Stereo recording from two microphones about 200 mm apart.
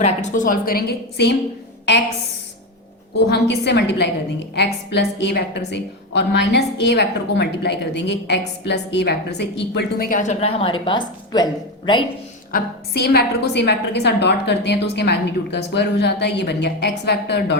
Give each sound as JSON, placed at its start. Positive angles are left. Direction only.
{"t": 0.0, "sound": "a woman's voice", "side_deg": 35}
{"t": 3.2, "sound": "a woman's voice", "side_deg": 55}
{"t": 12.5, "sound": "a woman's voice", "side_deg": 50}